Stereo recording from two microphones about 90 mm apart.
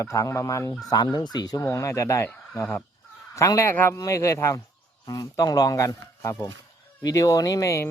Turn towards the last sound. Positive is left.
turn(degrees=35)  # may be behind; listen again after turning